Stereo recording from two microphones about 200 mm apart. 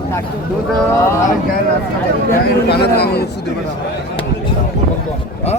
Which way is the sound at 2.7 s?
55° left (ahead or behind).